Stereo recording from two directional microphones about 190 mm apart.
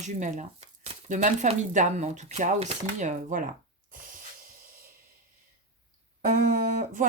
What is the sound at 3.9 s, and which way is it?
Snort, 45° right (ahead or behind).